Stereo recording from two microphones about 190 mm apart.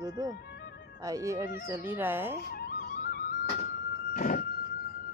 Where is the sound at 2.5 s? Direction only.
50° left (ahead or behind).